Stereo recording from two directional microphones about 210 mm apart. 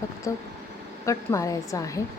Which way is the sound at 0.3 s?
15° left (ahead or behind).